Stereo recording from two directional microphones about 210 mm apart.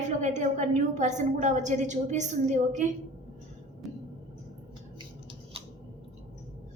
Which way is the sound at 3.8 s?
Centre (ahead or behind).